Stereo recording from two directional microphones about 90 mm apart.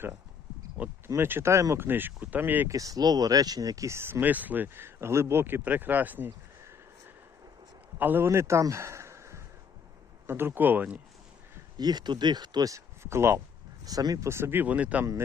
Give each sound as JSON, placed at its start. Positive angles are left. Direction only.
{"t": 1.0, "sound": "speech", "side_deg": -30}
{"t": 2.6, "sound": "speech", "side_deg": -40}
{"t": 7.9, "sound": "a man's voice", "side_deg": -20}
{"t": 11.8, "sound": "speech", "side_deg": -50}
{"t": 12.7, "sound": "speech", "side_deg": -30}
{"t": 13.8, "sound": "speech", "side_deg": -45}
{"t": 14.3, "sound": "speech", "side_deg": -30}